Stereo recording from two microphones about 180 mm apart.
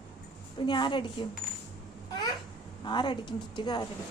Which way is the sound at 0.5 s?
25° left (ahead or behind).